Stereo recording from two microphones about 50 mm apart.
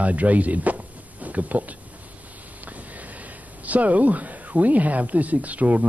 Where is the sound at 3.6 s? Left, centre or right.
Right.